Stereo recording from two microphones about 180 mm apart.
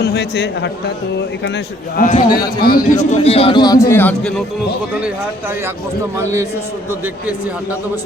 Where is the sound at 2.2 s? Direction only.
25° left (ahead or behind).